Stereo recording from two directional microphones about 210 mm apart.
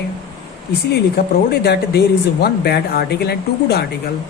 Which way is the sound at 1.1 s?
50° left (ahead or behind).